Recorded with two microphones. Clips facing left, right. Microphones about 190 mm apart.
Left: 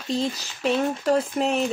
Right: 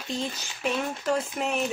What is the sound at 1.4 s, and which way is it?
Speech, 30° left (ahead or behind).